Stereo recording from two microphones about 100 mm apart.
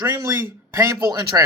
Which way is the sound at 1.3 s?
35° right (ahead or behind).